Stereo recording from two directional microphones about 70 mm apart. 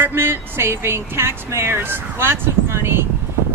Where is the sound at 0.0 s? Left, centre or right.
Right.